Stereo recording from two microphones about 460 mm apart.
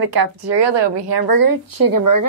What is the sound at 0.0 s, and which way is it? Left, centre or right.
Speech, right.